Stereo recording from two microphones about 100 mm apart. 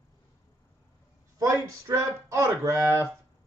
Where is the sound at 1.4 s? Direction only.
35° right (ahead or behind).